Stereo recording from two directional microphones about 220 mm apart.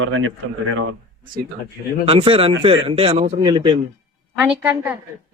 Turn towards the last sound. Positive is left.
turn(degrees=-10)  # may be behind; listen again after turning